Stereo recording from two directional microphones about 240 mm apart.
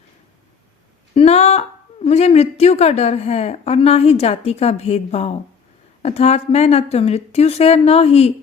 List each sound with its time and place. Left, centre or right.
1.1 s a woman's voice: left